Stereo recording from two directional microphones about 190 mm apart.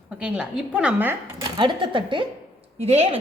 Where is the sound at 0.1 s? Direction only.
5° right (ahead or behind).